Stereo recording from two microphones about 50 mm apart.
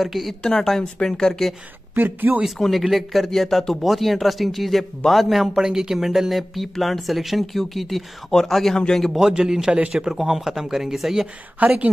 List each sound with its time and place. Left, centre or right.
0.0 s speech: centre
0.4 s speech: centre
2.0 s speech: right
2.8 s speech: centre
9.1 s speech: centre
11.6 s a woman's voice: right